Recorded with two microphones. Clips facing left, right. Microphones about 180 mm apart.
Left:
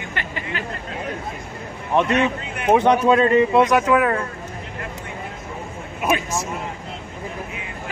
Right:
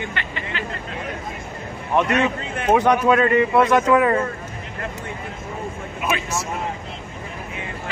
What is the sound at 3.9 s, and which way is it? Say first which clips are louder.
Speech: right 2 dB; centre (ahead or behind).